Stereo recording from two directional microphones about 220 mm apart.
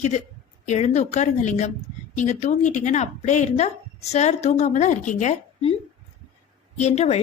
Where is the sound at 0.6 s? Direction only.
30° left (ahead or behind).